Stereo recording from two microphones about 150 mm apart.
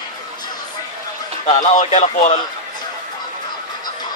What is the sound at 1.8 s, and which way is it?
Speech, 50° left (ahead or behind).